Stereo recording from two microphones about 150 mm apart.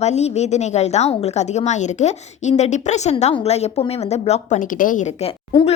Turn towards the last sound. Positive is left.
turn(degrees=40)  # may be behind; listen again after turning